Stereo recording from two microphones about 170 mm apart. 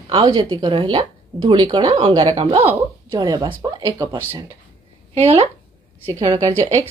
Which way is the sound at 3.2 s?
25° right (ahead or behind).